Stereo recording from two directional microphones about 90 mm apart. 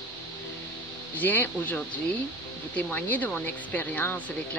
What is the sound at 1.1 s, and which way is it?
Speech, 20° left (ahead or behind).